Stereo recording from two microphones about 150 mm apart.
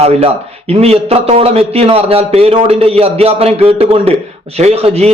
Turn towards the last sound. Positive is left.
turn(degrees=-45)  # may be behind; listen again after turning